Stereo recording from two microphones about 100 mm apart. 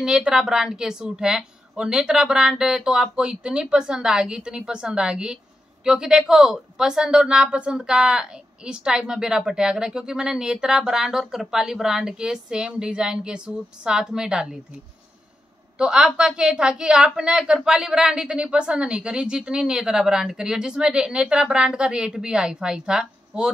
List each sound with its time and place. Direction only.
0.0 s a woman's voice: 5° right (ahead or behind)
15.8 s a woman's voice: 10° right (ahead or behind)